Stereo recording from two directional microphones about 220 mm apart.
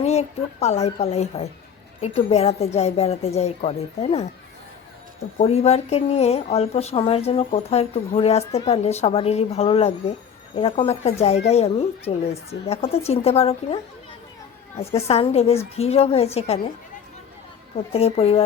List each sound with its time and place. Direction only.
0.0 s speech: 30° left (ahead or behind)
5.4 s speech: 30° left (ahead or behind)
14.8 s speech: 25° left (ahead or behind)
17.9 s speech: 25° left (ahead or behind)